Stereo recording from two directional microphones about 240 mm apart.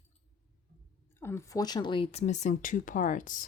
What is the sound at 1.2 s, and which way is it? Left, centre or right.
Speech, centre.